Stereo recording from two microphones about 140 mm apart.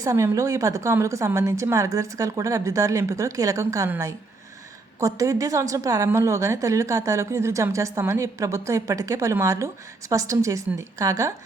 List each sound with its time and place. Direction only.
0.0 s a woman's voice: 25° right (ahead or behind)
4.9 s a woman's voice: 25° right (ahead or behind)